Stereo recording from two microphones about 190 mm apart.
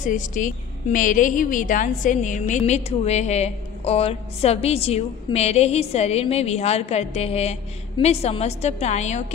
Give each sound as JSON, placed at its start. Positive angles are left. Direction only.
{"t": 0.0, "sound": "a woman's voice", "side_deg": 40}